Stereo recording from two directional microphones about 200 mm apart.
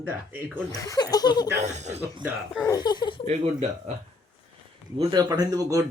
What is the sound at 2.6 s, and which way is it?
Speech, 20° left (ahead or behind).